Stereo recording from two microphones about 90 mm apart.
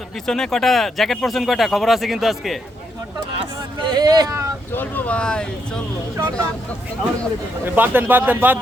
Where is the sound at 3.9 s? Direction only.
45° right (ahead or behind).